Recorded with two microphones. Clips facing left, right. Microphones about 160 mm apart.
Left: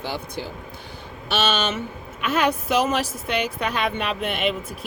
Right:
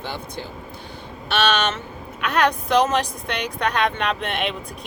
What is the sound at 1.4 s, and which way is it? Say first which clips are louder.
A woman's voice: right 3 dB; 5° left (ahead or behind).